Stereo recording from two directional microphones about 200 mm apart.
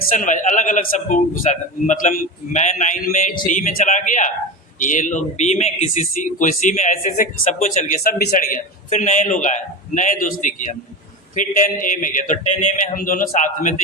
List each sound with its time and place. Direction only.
0.1 s speech: 40° left (ahead or behind)